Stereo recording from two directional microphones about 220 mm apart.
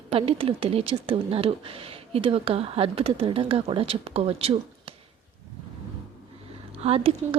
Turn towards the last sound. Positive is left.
turn(degrees=-25)  # may be behind; listen again after turning